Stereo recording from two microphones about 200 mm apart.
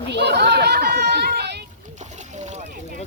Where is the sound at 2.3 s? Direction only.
35° right (ahead or behind).